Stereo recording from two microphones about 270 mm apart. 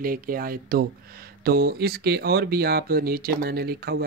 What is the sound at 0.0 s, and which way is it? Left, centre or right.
Speech, right.